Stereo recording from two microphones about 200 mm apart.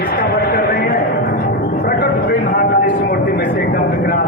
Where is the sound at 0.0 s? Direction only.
50° left (ahead or behind).